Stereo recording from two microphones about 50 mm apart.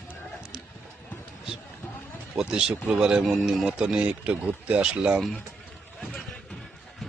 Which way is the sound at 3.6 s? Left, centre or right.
Centre.